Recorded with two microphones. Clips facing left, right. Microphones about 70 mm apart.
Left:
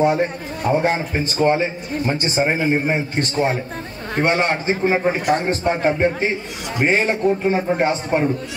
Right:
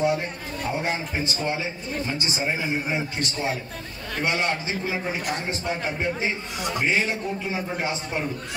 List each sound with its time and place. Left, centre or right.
0.0 s a man's voice: left